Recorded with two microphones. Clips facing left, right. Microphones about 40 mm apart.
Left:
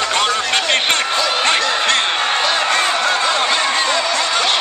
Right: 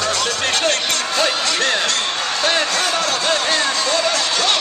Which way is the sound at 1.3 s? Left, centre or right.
Left.